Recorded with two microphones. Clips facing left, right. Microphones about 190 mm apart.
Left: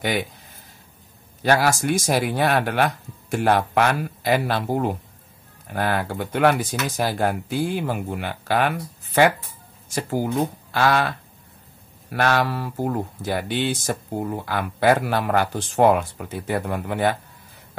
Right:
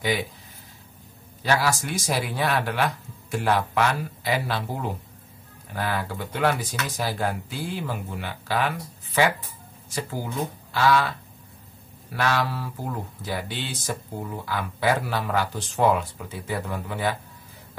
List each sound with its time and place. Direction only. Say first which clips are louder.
0.0 s speech: left 2 dB; 60° left (ahead or behind)
1.4 s speech: left 4 dB; 50° left (ahead or behind)